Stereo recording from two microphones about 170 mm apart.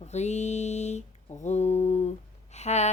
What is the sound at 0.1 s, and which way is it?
Mantra, 40° left (ahead or behind).